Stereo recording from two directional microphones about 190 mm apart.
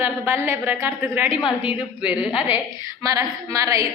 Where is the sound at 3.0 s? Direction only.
15° right (ahead or behind).